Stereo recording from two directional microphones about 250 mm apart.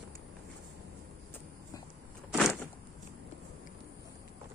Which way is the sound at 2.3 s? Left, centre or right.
Centre.